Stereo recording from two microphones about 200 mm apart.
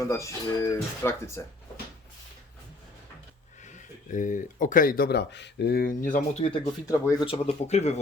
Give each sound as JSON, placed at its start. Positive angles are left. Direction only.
{"t": 0.0, "sound": "speech", "side_deg": 15}
{"t": 4.1, "sound": "speech", "side_deg": 40}
{"t": 6.8, "sound": "speech", "side_deg": 15}
{"t": 7.3, "sound": "speech", "side_deg": 35}